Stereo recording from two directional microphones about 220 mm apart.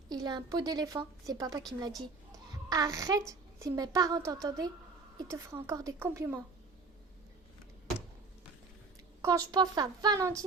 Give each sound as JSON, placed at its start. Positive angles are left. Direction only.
{"t": 0.1, "sound": "a woman's voice", "side_deg": -20}
{"t": 9.2, "sound": "a woman's voice", "side_deg": -15}